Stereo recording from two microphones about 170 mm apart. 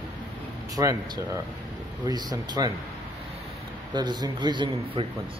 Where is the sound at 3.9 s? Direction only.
25° right (ahead or behind).